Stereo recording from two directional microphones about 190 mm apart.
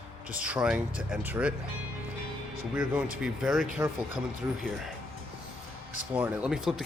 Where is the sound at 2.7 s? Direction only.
5° right (ahead or behind).